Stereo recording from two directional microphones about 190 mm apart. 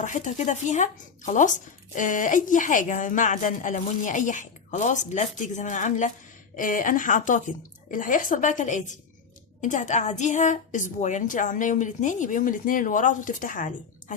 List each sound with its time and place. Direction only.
0.0 s speech: 40° left (ahead or behind)